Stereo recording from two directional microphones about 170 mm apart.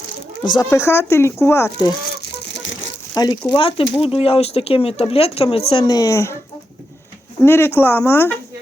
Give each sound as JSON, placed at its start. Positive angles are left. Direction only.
{"t": 0.5, "sound": "speech", "side_deg": 15}
{"t": 2.8, "sound": "crumpling", "side_deg": 90}
{"t": 3.2, "sound": "speech", "side_deg": 25}
{"t": 7.4, "sound": "speech", "side_deg": 15}